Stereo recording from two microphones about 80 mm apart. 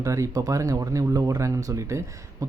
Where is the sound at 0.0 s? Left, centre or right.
Right.